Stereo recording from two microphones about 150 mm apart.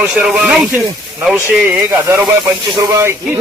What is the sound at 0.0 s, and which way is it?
Speech, 10° right (ahead or behind).